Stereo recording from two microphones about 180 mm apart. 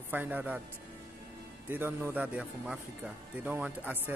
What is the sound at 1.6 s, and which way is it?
A man's voice, 10° right (ahead or behind).